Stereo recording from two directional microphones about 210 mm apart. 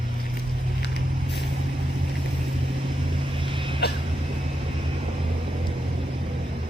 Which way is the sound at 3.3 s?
25° right (ahead or behind).